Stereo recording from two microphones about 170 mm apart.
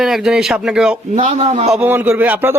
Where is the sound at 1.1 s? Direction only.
45° right (ahead or behind).